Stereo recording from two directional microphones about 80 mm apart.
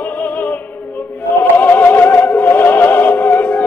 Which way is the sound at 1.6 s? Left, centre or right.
Left.